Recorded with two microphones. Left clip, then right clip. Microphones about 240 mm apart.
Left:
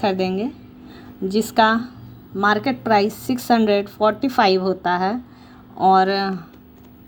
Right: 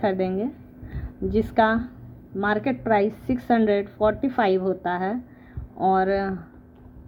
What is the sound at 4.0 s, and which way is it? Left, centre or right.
Speech, left.